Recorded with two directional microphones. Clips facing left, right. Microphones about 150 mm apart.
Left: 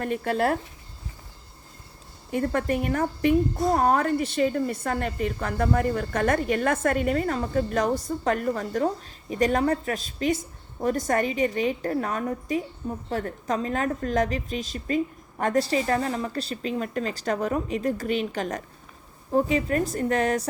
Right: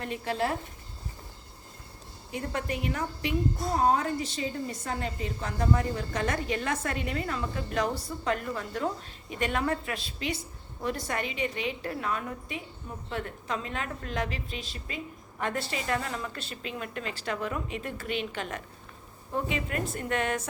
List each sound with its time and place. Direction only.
0.0 s a woman's voice: 50° left (ahead or behind)
2.3 s a woman's voice: 50° left (ahead or behind)
3.8 s a woman's voice: 60° left (ahead or behind); by 20.5 s 35° left (ahead or behind)